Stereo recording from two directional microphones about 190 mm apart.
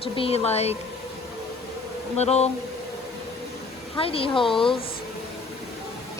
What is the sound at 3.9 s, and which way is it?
Speech, 30° left (ahead or behind).